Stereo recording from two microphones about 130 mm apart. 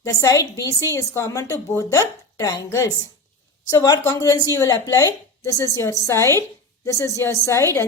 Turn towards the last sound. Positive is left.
turn(degrees=20)  # may be behind; listen again after turning